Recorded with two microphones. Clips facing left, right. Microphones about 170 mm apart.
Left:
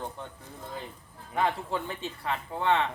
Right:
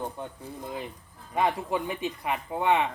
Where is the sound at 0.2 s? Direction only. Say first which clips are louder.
Right 4 dB; 15° right (ahead or behind).